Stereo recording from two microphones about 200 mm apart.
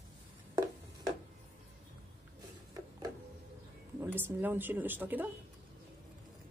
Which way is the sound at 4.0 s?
10° right (ahead or behind).